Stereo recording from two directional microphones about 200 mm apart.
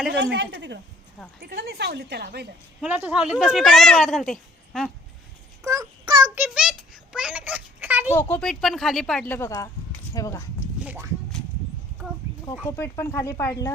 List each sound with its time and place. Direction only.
0.1 s a woman's voice: 60° right (ahead or behind)
1.4 s a woman's voice: 50° right (ahead or behind)
2.8 s speech: 5° right (ahead or behind)
5.6 s child singing: 15° right (ahead or behind)
6.4 s a sound: 5° right (ahead or behind)
8.1 s speech: 10° left (ahead or behind)
10.8 s speech: 10° right (ahead or behind)
12.5 s speech: 10° left (ahead or behind)